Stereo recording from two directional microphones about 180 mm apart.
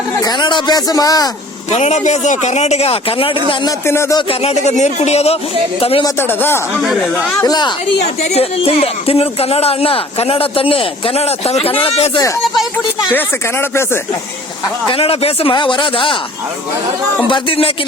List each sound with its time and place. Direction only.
0.2 s speech: 25° left (ahead or behind)
1.7 s speech: 40° left (ahead or behind)
3.8 s speech: 15° left (ahead or behind)
4.3 s speech: 35° left (ahead or behind)
6.1 s speech: 10° left (ahead or behind)
6.8 s speech: centre (ahead or behind)
7.4 s speech: 25° left (ahead or behind)
8.0 s speech: 35° left (ahead or behind)
12.7 s speech: 10° left (ahead or behind)
14.8 s speech: 30° left (ahead or behind)
17.2 s speech: 30° left (ahead or behind)